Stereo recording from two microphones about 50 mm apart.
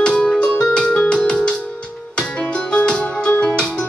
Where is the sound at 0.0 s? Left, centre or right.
Centre.